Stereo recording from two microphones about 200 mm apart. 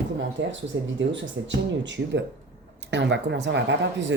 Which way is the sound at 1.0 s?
65° right (ahead or behind).